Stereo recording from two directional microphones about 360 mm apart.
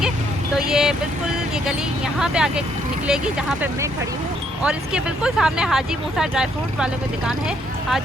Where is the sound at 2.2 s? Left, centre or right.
Centre.